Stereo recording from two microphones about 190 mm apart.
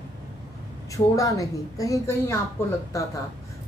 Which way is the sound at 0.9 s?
15° left (ahead or behind).